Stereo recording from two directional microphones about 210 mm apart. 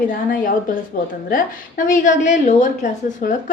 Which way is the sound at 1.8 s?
35° left (ahead or behind).